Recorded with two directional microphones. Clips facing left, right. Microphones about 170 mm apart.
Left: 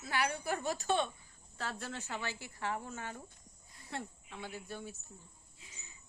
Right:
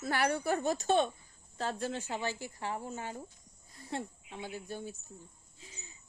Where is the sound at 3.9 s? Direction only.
20° right (ahead or behind).